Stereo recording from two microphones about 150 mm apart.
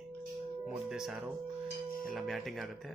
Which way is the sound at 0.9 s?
5° right (ahead or behind).